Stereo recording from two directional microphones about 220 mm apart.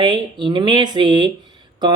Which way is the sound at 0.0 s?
20° right (ahead or behind).